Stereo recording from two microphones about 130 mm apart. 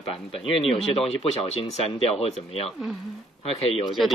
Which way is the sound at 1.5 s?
50° left (ahead or behind).